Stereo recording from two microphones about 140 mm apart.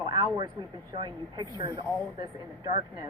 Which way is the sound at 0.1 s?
35° right (ahead or behind).